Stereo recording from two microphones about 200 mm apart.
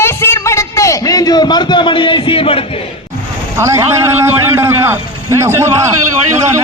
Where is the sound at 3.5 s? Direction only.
15° right (ahead or behind).